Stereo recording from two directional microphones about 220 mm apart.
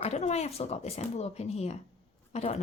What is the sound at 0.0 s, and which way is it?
Speech, 30° left (ahead or behind).